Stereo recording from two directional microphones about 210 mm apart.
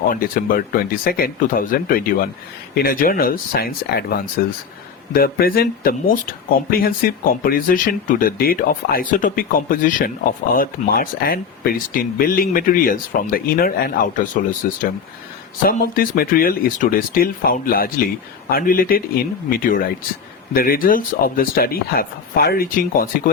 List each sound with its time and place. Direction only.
0.1 s speech: 40° left (ahead or behind)